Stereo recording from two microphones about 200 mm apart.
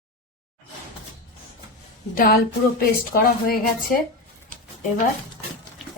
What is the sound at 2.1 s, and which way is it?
Speech, 45° left (ahead or behind).